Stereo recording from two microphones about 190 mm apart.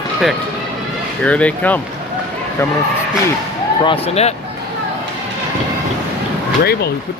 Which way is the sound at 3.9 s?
30° left (ahead or behind).